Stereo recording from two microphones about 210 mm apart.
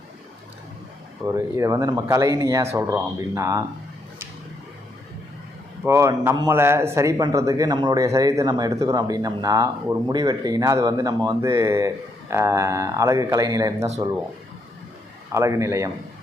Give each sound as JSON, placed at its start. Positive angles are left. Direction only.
{"t": 1.2, "sound": "speech", "side_deg": -15}
{"t": 5.8, "sound": "speech", "side_deg": -15}
{"t": 15.3, "sound": "speech", "side_deg": -15}